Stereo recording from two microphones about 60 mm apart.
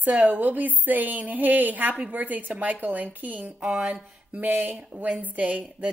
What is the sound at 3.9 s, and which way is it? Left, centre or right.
A woman's voice, right.